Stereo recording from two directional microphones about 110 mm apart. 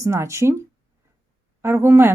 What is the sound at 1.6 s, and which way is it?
Speech, 20° right (ahead or behind).